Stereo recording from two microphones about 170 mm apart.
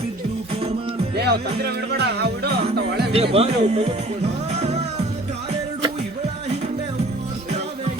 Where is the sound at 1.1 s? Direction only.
75° right (ahead or behind).